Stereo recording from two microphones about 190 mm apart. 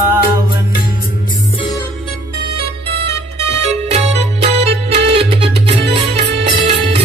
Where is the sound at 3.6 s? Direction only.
35° right (ahead or behind).